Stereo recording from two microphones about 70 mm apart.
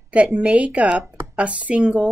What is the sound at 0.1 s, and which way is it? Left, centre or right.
A woman's voice, centre.